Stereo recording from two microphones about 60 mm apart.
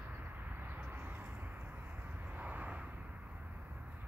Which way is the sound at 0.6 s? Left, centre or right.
Right.